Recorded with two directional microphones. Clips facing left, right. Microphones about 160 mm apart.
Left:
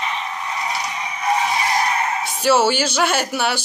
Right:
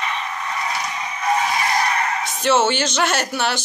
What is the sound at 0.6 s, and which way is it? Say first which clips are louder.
Vehicle: even; 10° left (ahead or behind).